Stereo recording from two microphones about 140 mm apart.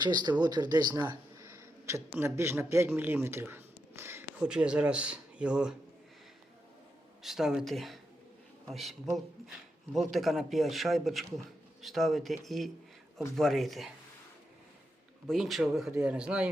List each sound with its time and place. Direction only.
0.0 s speech: 30° right (ahead or behind); by 5.7 s 5° right (ahead or behind)
7.2 s a man's voice: 5° right (ahead or behind)
15.3 s a man's voice: centre (ahead or behind)